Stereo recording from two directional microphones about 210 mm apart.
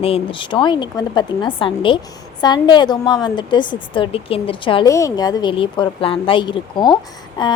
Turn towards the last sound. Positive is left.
turn(degrees=20)  # may be behind; listen again after turning